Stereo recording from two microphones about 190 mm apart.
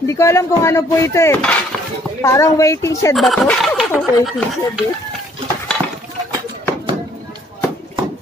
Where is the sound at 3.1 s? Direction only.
Centre (ahead or behind).